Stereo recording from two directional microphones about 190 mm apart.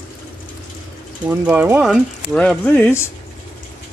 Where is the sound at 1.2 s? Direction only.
10° right (ahead or behind); by 3.1 s 10° left (ahead or behind).